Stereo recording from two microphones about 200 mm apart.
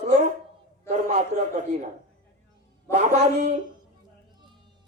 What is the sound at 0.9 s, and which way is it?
Speech, 35° right (ahead or behind).